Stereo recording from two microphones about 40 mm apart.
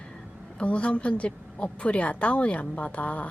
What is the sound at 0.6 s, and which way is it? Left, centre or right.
A woman's voice, left.